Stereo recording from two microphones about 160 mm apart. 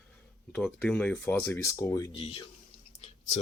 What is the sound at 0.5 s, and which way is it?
Speech, 5° left (ahead or behind).